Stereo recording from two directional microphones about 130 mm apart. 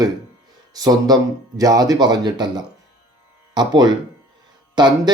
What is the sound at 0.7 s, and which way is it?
Speech, 30° right (ahead or behind).